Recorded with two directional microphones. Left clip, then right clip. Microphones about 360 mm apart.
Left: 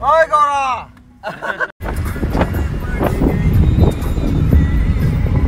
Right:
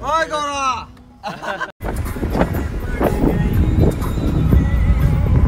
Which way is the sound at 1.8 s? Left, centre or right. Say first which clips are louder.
Left 1 dB; centre.